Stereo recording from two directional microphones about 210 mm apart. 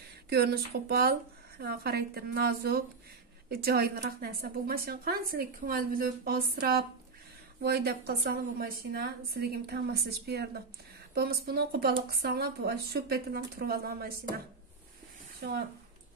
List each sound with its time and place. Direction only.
0.3 s a woman's voice: 50° right (ahead or behind)